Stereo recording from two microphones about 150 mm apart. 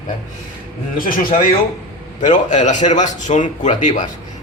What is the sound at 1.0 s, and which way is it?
Speech, 70° left (ahead or behind).